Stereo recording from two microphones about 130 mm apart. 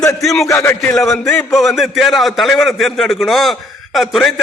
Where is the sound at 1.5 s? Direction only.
Centre (ahead or behind).